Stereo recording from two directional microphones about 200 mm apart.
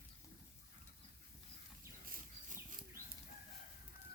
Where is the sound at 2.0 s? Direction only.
40° right (ahead or behind).